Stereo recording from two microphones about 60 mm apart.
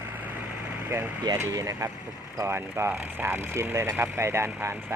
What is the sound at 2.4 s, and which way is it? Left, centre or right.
Speech, right.